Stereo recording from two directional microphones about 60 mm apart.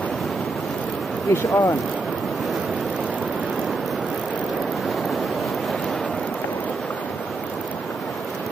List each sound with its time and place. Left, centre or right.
1.3 s speech: left